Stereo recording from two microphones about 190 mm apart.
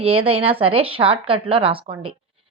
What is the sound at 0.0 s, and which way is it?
Speech, 30° right (ahead or behind).